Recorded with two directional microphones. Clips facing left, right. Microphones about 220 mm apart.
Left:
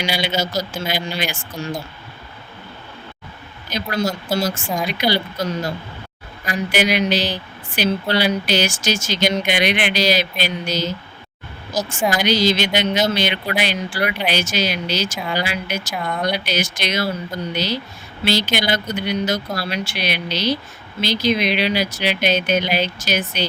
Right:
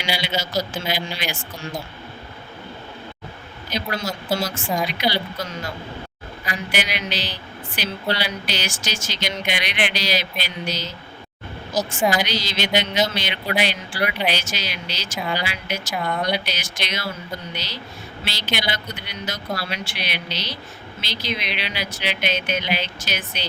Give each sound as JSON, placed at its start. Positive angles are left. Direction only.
{"t": 0.0, "sound": "speech", "side_deg": 45}
{"t": 3.7, "sound": "speech", "side_deg": 45}
{"t": 11.7, "sound": "speech", "side_deg": 0}
{"t": 12.2, "sound": "speech", "side_deg": 45}
{"t": 15.9, "sound": "speech", "side_deg": 0}
{"t": 16.5, "sound": "speech", "side_deg": 45}
{"t": 18.3, "sound": "speech", "side_deg": 45}